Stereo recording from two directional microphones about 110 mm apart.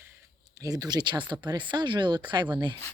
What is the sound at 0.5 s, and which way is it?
Speech, 30° right (ahead or behind).